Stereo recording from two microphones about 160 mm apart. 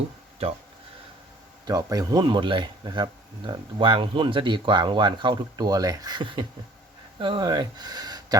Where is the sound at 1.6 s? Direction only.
25° right (ahead or behind).